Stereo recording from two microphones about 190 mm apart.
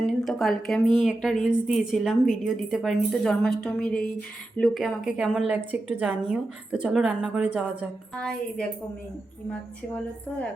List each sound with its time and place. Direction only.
0.0 s speech: centre (ahead or behind)
8.1 s speech: 5° left (ahead or behind)